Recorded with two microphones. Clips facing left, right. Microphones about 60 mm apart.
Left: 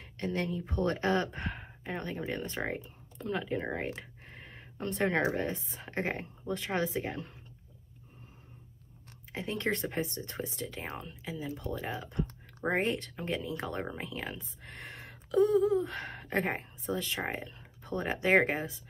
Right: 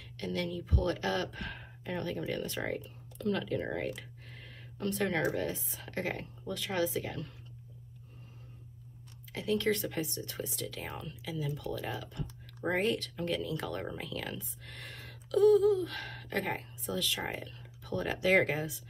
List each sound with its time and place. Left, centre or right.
0.2 s speech: left
4.3 s a sound: left
5.9 s speech: left
9.3 s speech: left